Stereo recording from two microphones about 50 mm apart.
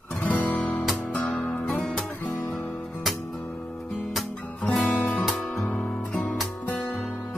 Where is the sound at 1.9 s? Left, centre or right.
Centre.